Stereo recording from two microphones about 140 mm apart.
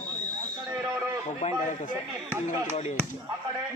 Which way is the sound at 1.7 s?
60° left (ahead or behind).